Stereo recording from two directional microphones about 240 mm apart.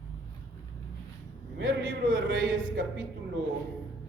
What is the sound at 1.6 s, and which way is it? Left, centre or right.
Speech, right.